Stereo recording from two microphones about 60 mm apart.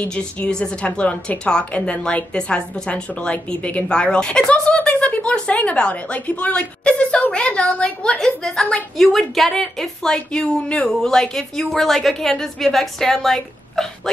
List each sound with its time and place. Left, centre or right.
0.0 s a woman's voice: centre
8.9 s a woman's voice: centre